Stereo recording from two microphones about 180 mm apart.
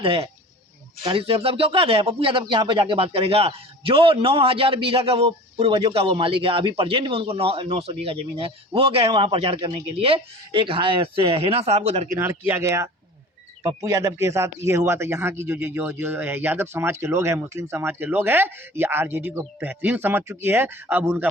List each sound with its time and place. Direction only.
0.0 s speech: 30° right (ahead or behind)
12.2 s speech: 10° right (ahead or behind)